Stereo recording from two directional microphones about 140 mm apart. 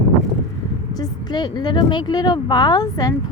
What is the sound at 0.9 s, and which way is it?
Speech, 30° left (ahead or behind).